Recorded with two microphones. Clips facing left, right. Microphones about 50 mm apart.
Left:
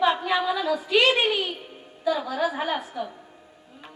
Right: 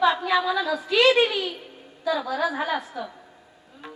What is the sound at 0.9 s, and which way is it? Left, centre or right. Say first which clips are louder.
A woman's voice: right 2 dB; left.